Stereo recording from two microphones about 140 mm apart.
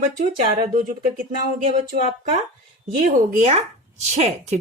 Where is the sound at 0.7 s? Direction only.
80° right.